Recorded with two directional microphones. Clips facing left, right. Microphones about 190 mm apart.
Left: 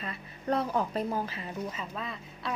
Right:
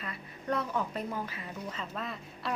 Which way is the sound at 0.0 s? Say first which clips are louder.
Left 3 dB; 30° left (ahead or behind).